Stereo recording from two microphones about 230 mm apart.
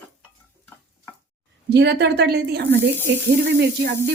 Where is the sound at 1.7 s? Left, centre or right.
Right.